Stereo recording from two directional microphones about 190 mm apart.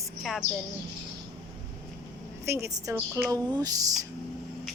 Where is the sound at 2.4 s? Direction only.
15° right (ahead or behind).